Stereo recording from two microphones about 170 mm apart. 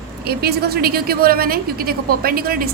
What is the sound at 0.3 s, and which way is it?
A woman's voice, 70° right (ahead or behind).